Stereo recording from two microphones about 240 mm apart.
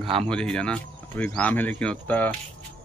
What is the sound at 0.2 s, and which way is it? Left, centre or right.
Speech, centre.